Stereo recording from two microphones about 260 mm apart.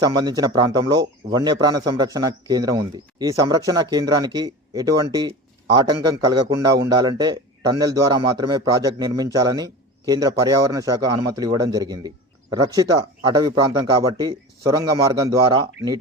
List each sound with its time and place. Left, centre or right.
0.0 s a man's voice: centre